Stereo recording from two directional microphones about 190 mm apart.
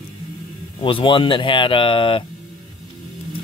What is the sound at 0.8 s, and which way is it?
Speech, 25° left (ahead or behind).